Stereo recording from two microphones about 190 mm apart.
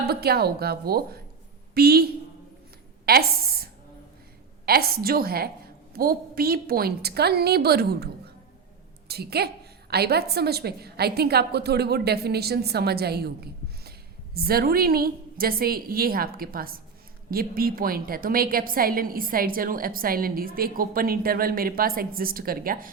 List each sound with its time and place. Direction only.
0.0 s a woman's voice: 55° right (ahead or behind)
3.1 s a sound: 55° right (ahead or behind)
4.6 s a woman's voice: 55° right (ahead or behind)